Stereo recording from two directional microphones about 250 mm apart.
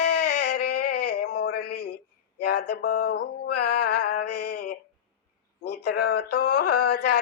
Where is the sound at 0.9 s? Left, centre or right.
Left.